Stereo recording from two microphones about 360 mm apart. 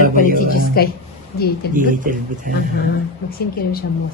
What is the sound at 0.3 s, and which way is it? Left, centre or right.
Speech, left.